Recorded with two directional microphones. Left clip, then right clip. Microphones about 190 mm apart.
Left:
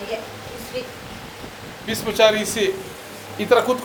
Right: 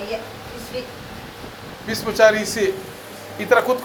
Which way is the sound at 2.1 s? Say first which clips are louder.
Right 2 dB; 20° left (ahead or behind).